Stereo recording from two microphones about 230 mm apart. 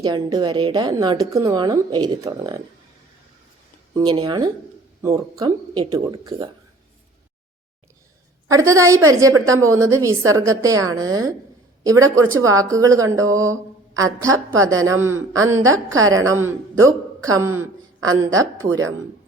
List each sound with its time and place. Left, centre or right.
0.0 s a woman's voice: centre
3.9 s a woman's voice: centre
8.4 s a woman's voice: centre
14.9 s a woman's voice: right
15.6 s a woman's voice: centre
17.5 s a sound: centre
18.3 s a woman's voice: centre